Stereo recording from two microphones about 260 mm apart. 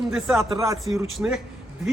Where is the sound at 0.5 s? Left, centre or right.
Centre.